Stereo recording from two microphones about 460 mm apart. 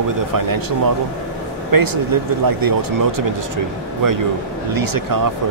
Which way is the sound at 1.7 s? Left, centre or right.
Right.